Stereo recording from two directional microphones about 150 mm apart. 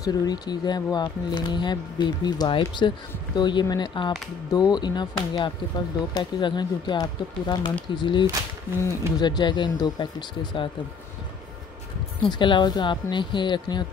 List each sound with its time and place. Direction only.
0.0 s speech: 25° left (ahead or behind)
12.2 s speech: 35° left (ahead or behind)